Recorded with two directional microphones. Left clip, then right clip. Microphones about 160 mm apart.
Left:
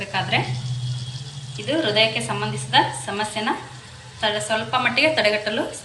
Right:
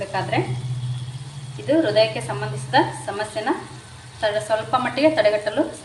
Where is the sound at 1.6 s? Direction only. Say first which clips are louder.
Right 2 dB; 35° right (ahead or behind).